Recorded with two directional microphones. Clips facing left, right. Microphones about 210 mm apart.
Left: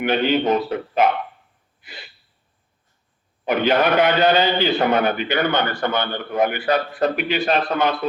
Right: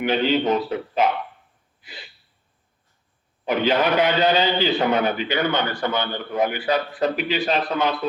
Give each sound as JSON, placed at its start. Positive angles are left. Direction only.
{"t": 0.0, "sound": "a man's voice", "side_deg": 55}
{"t": 1.8, "sound": "gasp", "side_deg": 60}
{"t": 3.4, "sound": "a man's voice", "side_deg": 55}